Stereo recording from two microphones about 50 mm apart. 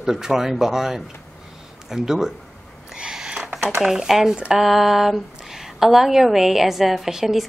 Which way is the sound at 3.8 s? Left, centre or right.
Centre.